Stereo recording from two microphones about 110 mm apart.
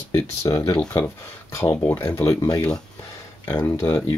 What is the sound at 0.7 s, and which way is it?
Speech, 15° left (ahead or behind).